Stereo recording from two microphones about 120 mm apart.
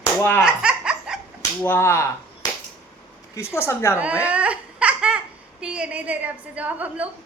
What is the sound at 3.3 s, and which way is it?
Speech, 20° left (ahead or behind).